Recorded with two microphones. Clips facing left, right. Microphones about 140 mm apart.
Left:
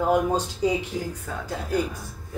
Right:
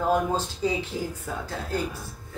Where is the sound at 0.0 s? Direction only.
15° left (ahead or behind).